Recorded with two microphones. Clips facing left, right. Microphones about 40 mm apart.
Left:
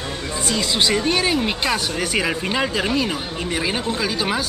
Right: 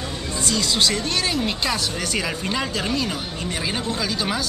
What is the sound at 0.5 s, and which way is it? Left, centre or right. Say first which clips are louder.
Speech: left 2 dB; centre.